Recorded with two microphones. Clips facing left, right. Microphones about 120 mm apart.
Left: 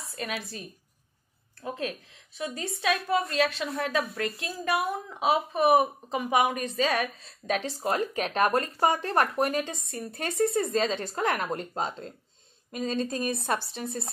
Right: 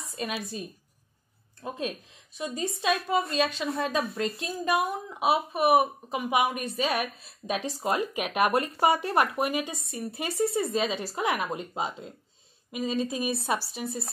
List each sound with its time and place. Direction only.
0.0 s a woman's voice: 15° right (ahead or behind)